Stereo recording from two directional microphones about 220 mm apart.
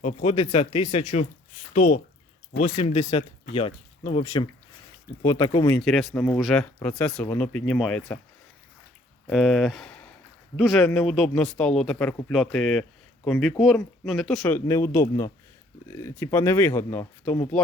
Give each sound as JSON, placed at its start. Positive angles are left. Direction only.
{"t": 0.0, "sound": "speech", "side_deg": 30}
{"t": 5.8, "sound": "speech", "side_deg": 0}
{"t": 9.2, "sound": "speech", "side_deg": 0}